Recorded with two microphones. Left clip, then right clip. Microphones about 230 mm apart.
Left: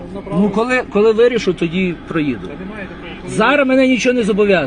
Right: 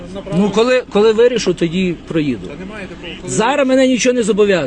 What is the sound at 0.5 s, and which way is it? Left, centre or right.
A man's voice, right.